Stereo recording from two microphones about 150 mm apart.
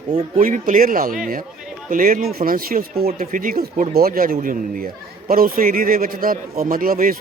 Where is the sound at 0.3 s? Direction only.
65° right (ahead or behind).